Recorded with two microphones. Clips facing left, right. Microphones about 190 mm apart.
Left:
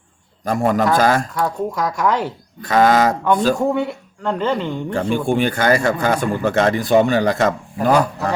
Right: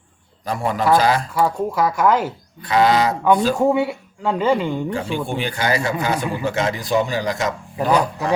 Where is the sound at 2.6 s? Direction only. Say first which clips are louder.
Left 2 dB; 45° left (ahead or behind).